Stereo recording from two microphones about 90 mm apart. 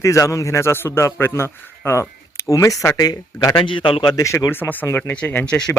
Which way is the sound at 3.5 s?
65° left (ahead or behind).